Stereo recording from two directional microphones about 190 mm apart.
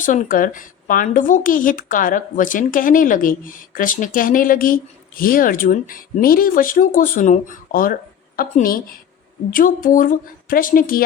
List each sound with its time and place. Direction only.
0.0 s a woman's voice: 45° left (ahead or behind)